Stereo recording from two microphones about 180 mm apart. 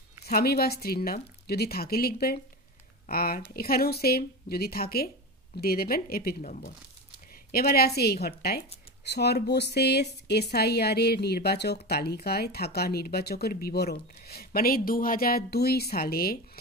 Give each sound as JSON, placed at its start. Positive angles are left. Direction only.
{"t": 0.2, "sound": "speech", "side_deg": 60}